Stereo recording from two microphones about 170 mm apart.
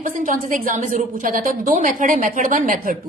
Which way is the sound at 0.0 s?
50° right (ahead or behind).